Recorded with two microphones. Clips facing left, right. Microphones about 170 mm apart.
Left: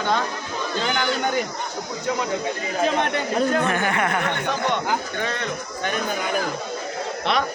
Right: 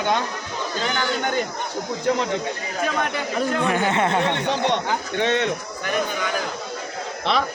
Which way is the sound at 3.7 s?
20° right (ahead or behind).